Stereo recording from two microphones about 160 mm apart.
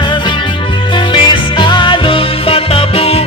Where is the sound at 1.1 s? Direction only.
30° left (ahead or behind).